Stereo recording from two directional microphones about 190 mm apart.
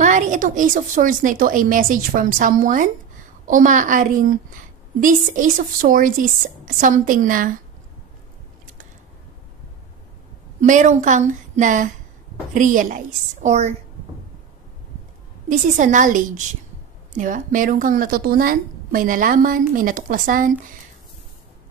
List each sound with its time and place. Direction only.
0.0 s a woman's voice: 40° right (ahead or behind)
10.6 s a woman's voice: 40° right (ahead or behind)
15.8 s a woman's voice: 45° right (ahead or behind)